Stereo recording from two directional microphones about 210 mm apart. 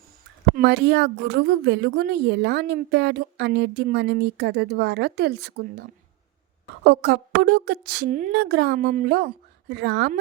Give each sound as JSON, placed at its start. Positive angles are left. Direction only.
{"t": 0.5, "sound": "a woman's voice", "side_deg": -50}
{"t": 6.8, "sound": "a woman's voice", "side_deg": -50}